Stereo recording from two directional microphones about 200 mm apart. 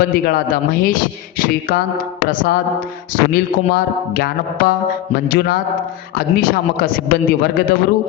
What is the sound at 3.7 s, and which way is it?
Speech, 45° left (ahead or behind).